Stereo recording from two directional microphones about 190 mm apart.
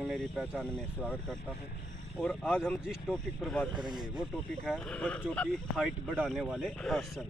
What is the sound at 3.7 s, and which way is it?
Speech, 20° right (ahead or behind).